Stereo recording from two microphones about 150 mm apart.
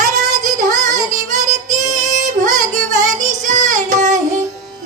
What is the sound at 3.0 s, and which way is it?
Music, 25° right (ahead or behind).